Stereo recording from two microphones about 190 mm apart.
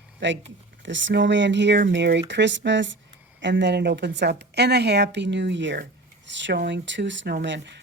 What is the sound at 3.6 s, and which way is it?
A woman's voice, 65° right (ahead or behind).